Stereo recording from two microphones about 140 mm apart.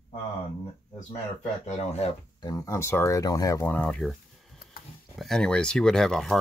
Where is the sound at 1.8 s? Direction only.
50° left (ahead or behind).